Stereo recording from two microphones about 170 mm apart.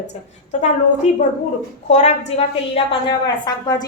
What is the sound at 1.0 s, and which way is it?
A woman's voice, 45° left (ahead or behind).